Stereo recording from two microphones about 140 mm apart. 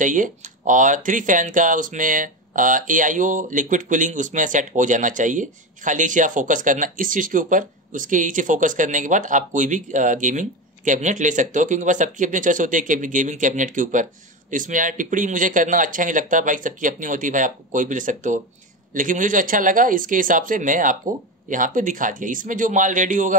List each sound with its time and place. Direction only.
0.0 s speech: 65° right (ahead or behind)